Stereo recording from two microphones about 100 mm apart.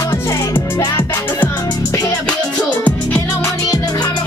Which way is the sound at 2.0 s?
15° left (ahead or behind).